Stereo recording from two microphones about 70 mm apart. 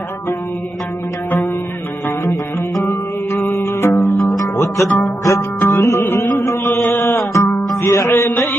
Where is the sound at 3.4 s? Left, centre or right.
Left.